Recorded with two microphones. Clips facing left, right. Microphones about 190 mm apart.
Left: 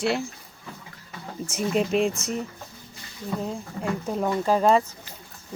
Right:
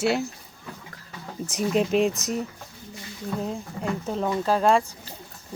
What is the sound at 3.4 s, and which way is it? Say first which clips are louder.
Speech: even; centre (ahead or behind).